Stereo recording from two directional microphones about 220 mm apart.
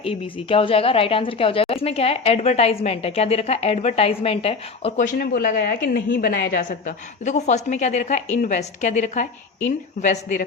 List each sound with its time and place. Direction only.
0.0 s a woman's voice: 25° left (ahead or behind)